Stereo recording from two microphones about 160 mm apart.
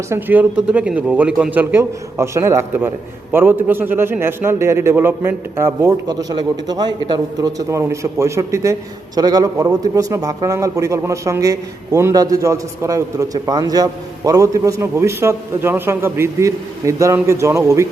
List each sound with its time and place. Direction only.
0.1 s a man's voice: 10° right (ahead or behind)